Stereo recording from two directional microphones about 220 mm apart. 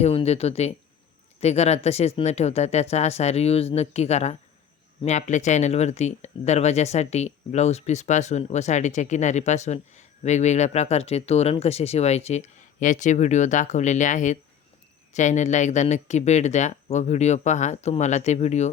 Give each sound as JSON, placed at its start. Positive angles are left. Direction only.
{"t": 0.0, "sound": "speech", "side_deg": 25}